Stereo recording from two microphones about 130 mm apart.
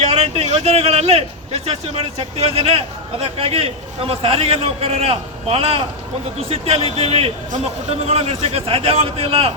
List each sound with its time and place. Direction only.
0.0 s a man's voice: 55° right (ahead or behind)